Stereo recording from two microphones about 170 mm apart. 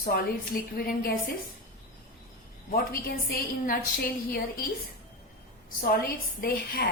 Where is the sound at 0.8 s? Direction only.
65° left (ahead or behind).